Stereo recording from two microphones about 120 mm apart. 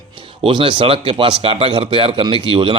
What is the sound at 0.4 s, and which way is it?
Speech, 45° right (ahead or behind).